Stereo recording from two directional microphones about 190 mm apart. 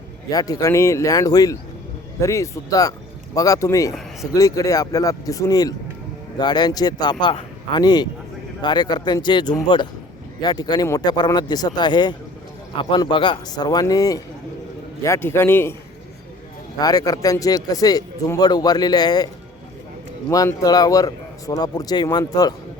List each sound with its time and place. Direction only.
0.3 s a man's voice: 20° left (ahead or behind)
16.8 s a man's voice: 20° left (ahead or behind)
20.3 s a man's voice: 20° left (ahead or behind)